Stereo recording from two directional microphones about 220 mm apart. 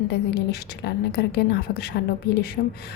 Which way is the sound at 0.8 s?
50° left (ahead or behind).